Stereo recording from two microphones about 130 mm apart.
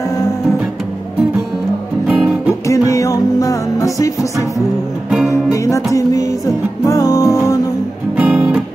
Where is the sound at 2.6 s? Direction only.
25° left (ahead or behind).